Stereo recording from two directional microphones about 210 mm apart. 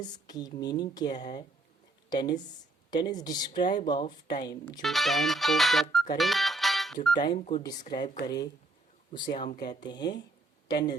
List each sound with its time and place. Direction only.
0.0 s speech: 20° left (ahead or behind)
1.1 s speech: 35° left (ahead or behind)
2.0 s speech: 20° left (ahead or behind)
4.8 s speech: centre (ahead or behind)
6.1 s music: centre (ahead or behind)
7.1 s speech: 20° left (ahead or behind)
7.3 s speech: 30° left (ahead or behind)
7.6 s speech: 20° left (ahead or behind)
9.8 s speech: 20° left (ahead or behind)